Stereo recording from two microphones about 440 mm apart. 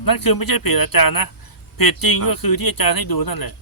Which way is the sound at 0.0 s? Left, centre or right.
Left.